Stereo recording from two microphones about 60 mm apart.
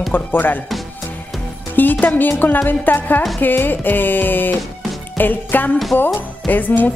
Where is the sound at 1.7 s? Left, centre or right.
Left.